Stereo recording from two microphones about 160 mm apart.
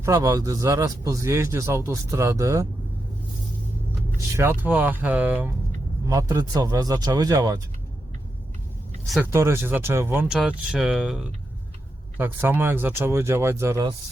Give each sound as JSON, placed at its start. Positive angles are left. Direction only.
{"t": 0.0, "sound": "speech", "side_deg": -20}
{"t": 4.4, "sound": "speech", "side_deg": -15}
{"t": 6.1, "sound": "speech", "side_deg": -20}
{"t": 9.2, "sound": "speech", "side_deg": -15}